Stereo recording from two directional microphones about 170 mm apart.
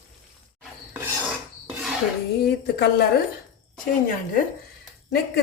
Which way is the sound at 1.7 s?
5° right (ahead or behind).